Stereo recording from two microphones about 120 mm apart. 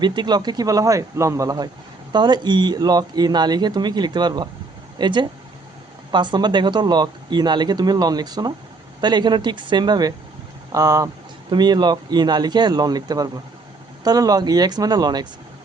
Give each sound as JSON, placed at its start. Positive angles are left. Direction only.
{"t": 0.0, "sound": "speech", "side_deg": -40}